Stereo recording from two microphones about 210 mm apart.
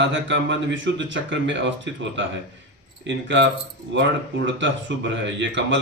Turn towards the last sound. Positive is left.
turn(degrees=-60)  # may be behind; listen again after turning